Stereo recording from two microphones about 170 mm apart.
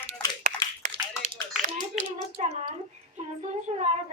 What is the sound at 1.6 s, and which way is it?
Hands, 45° right (ahead or behind).